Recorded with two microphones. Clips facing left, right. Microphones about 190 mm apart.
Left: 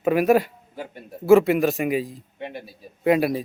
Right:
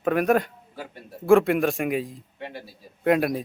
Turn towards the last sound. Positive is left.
turn(degrees=0)  # may be behind; listen again after turning